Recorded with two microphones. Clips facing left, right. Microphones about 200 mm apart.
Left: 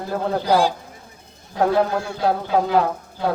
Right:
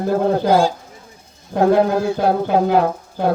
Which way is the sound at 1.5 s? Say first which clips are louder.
Right 5 dB; 50° right (ahead or behind).